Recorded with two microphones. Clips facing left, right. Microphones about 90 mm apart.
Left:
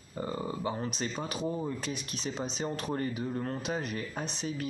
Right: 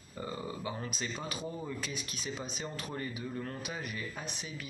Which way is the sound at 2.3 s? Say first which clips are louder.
Left 6 dB; 30° left (ahead or behind).